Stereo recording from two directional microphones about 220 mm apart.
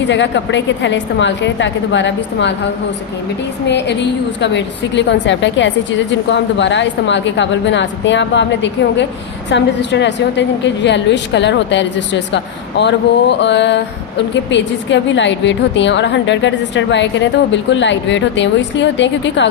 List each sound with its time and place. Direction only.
0.1 s a woman's voice: 55° left (ahead or behind)
3.7 s a woman's voice: 50° left (ahead or behind)